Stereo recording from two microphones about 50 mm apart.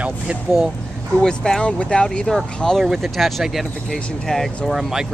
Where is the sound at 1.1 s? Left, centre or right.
Centre.